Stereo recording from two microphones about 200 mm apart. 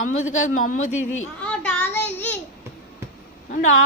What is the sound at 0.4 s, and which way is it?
Speech, 40° left (ahead or behind).